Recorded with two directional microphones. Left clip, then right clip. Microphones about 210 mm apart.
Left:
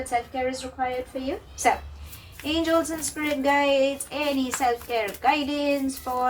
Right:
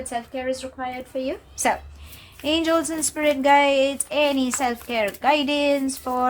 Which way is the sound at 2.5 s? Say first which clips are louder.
Right 2 dB; 55° right (ahead or behind).